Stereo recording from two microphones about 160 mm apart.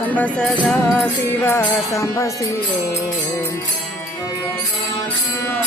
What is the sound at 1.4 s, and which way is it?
Music, 15° left (ahead or behind).